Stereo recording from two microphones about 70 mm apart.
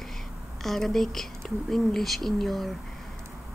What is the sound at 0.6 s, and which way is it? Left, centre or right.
Speech, centre.